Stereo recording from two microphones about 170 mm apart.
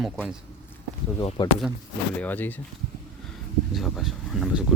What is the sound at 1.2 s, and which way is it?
Speech, 30° left (ahead or behind).